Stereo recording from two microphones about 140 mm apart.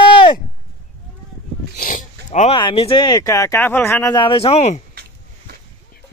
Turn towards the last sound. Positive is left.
turn(degrees=50)  # may be behind; listen again after turning